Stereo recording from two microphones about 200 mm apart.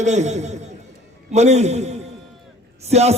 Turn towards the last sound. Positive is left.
turn(degrees=-30)  # may be behind; listen again after turning